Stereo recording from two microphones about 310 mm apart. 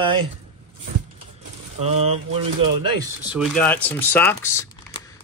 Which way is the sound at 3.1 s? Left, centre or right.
Centre.